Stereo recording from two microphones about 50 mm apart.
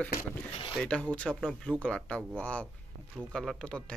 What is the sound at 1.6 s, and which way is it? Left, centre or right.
Speech, centre.